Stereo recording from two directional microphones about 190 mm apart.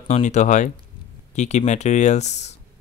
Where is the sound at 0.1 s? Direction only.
40° left (ahead or behind).